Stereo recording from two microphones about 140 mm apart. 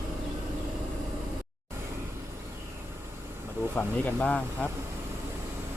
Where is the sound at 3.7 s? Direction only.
10° left (ahead or behind).